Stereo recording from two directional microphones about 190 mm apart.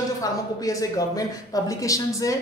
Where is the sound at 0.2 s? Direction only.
20° left (ahead or behind).